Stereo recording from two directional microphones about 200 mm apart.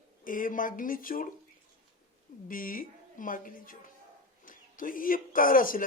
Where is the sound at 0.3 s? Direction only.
40° left (ahead or behind).